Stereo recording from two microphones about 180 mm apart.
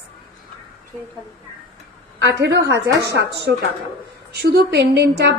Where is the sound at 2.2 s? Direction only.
75° right (ahead or behind).